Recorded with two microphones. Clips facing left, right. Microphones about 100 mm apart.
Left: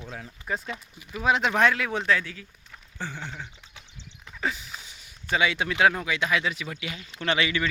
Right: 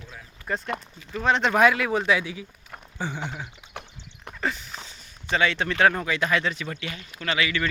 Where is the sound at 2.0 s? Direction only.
15° right (ahead or behind).